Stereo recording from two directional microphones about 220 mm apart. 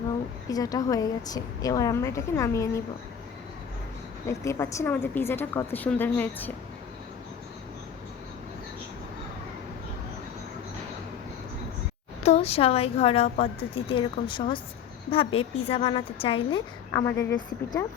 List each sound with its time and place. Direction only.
0.4 s a woman's voice: 15° left (ahead or behind)
4.3 s a woman's voice: 10° left (ahead or behind)
12.2 s a woman's voice: 30° left (ahead or behind)